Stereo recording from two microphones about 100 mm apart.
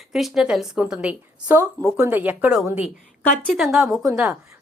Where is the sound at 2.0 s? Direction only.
20° right (ahead or behind).